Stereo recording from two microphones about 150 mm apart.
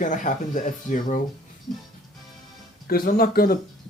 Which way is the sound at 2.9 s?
85° left.